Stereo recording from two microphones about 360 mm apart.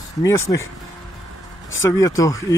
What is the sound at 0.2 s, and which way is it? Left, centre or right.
Speech, centre.